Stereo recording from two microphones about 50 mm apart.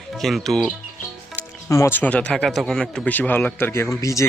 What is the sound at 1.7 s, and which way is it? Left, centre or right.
Speech, left.